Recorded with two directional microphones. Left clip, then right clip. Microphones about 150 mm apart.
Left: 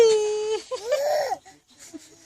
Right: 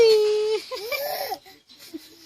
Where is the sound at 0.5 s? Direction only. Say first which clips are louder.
Left 2 dB; 30° left (ahead or behind).